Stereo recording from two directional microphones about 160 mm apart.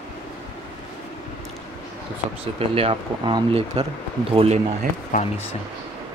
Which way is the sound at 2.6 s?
35° right (ahead or behind).